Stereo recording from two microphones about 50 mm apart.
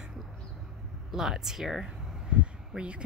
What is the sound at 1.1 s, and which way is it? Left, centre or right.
Speech, centre.